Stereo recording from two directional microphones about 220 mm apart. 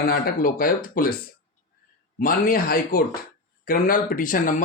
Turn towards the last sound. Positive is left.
turn(degrees=40)  # may be behind; listen again after turning